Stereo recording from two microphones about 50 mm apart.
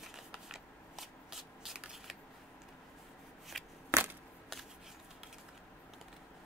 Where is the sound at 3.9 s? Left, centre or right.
Right.